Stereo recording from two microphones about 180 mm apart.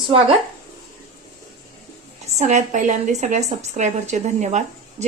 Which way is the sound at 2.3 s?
40° right (ahead or behind).